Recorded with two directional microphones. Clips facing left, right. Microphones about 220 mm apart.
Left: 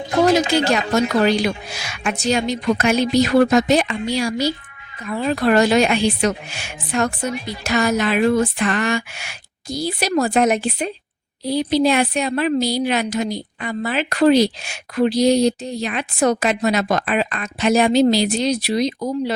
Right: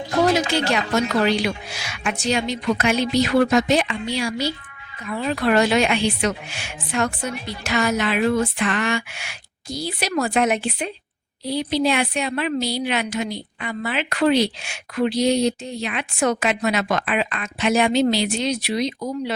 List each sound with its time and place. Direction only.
0.3 s a woman's voice: 40° left (ahead or behind)